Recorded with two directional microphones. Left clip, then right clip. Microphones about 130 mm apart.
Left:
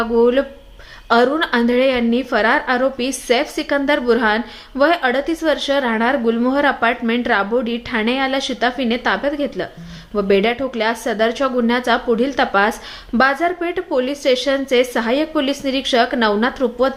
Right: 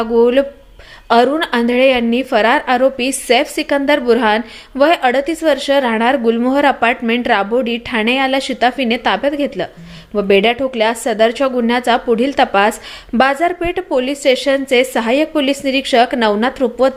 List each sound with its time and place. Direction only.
0.0 s a woman's voice: 25° right (ahead or behind)